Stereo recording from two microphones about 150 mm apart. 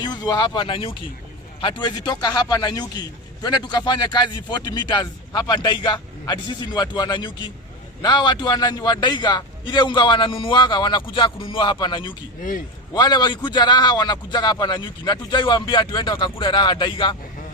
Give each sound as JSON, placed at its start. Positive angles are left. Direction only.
{"t": 0.0, "sound": "a man's voice", "side_deg": 30}